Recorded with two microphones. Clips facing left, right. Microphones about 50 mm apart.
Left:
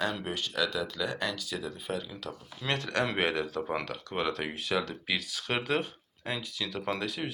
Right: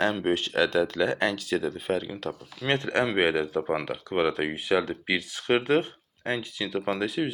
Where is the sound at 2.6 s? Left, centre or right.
Right.